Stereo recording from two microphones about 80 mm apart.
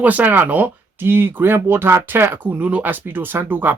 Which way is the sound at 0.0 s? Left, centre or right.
Centre.